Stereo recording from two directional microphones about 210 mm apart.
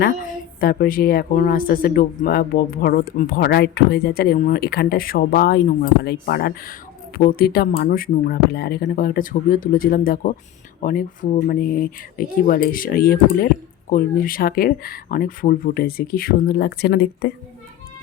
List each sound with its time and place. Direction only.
0.0 s a woman's voice: 45° left (ahead or behind)